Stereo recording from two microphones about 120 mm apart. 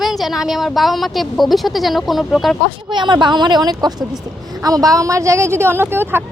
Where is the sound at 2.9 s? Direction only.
40° right (ahead or behind); by 6.2 s 20° right (ahead or behind).